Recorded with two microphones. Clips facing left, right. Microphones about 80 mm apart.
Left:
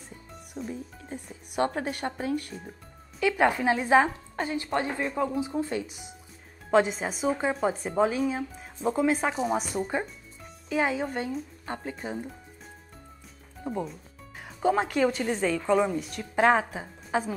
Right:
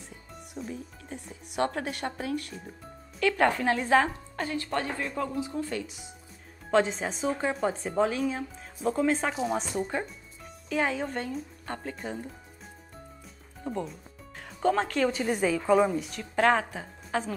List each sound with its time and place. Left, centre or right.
0.6 s a woman's voice: centre
3.2 s a woman's voice: centre
6.7 s a woman's voice: centre
13.7 s a woman's voice: centre
15.1 s speech: centre
16.3 s a woman's voice: centre